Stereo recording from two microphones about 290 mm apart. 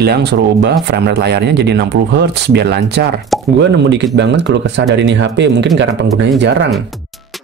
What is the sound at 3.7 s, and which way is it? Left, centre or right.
Speech, right.